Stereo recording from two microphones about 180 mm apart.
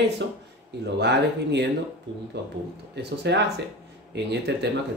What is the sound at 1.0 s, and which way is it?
Speech, 70° right (ahead or behind).